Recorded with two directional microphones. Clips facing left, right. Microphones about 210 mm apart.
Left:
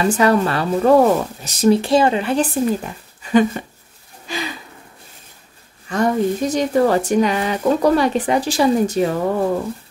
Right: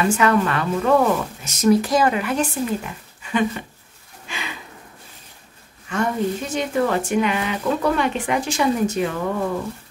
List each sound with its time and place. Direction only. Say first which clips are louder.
0.0 s speech: left 3 dB; 35° left (ahead or behind)
4.3 s a sound: left 7 dB; 35° left (ahead or behind)
5.9 s speech: left 4 dB; 35° left (ahead or behind)